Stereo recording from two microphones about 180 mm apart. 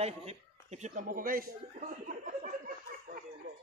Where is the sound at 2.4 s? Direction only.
50° right (ahead or behind).